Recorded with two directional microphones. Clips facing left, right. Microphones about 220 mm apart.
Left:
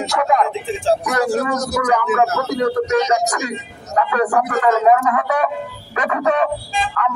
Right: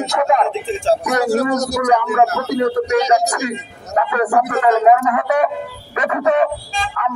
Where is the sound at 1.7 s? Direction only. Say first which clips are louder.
Right 1 dB; 20° right (ahead or behind).